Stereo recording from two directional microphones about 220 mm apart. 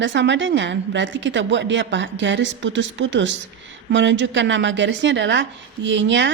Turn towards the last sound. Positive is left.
turn(degrees=-55)  # may be behind; listen again after turning